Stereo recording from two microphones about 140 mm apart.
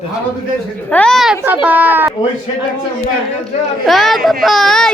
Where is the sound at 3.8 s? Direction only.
Centre (ahead or behind).